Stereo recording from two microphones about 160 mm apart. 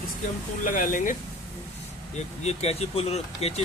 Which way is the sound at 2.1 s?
45° left (ahead or behind).